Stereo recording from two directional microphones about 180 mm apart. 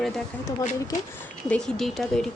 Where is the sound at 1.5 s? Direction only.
5° left (ahead or behind).